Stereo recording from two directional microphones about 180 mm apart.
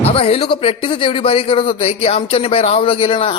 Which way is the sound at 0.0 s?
30° left (ahead or behind).